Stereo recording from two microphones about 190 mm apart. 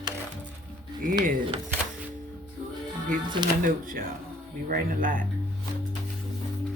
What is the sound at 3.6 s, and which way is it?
Speech, 50° right (ahead or behind).